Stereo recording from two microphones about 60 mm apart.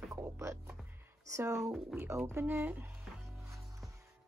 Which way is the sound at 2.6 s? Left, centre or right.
Right.